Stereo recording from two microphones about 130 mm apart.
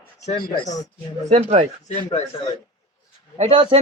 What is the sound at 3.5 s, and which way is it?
Speech, 40° right (ahead or behind).